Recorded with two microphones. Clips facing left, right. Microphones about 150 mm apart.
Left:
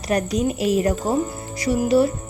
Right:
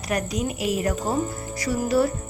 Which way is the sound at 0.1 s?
30° left (ahead or behind).